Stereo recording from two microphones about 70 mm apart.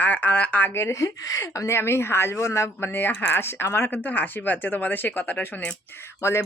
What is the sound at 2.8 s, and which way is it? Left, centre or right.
Speech, left.